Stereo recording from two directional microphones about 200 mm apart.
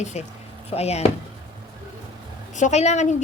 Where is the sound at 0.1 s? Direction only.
35° left (ahead or behind).